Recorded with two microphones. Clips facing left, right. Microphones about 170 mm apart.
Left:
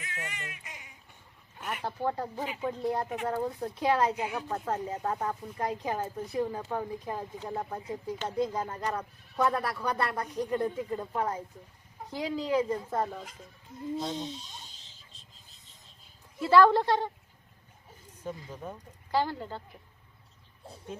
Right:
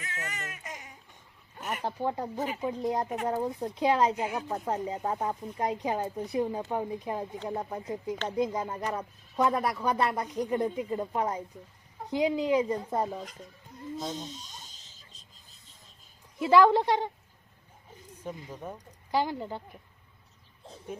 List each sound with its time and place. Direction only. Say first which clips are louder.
0.0 s baby cry: right 2 dB; 40° right (ahead or behind)
1.8 s speech: even; 15° right (ahead or behind)
14.3 s a sound: left 3 dB; 45° right (ahead or behind)
16.4 s speech: even; 15° right (ahead or behind)
18.3 s speech: even; 10° right (ahead or behind)